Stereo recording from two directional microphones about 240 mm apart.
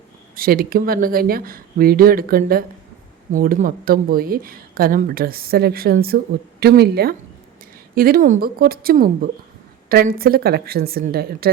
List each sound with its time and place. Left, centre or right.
0.3 s speech: right